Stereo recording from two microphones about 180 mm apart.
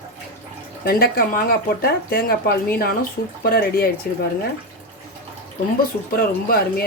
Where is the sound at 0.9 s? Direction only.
55° left (ahead or behind).